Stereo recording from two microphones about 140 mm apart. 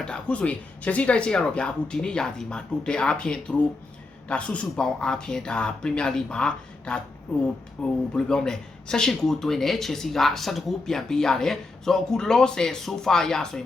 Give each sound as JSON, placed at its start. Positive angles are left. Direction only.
{"t": 0.0, "sound": "speech", "side_deg": 5}